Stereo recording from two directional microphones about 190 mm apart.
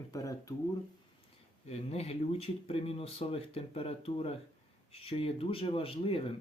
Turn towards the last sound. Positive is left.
turn(degrees=30)  # may be behind; listen again after turning